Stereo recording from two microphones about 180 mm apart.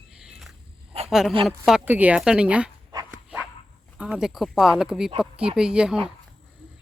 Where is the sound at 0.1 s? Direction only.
5° right (ahead or behind).